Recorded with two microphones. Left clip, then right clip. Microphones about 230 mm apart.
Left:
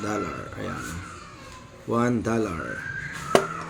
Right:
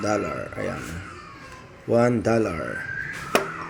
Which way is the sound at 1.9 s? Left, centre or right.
Centre.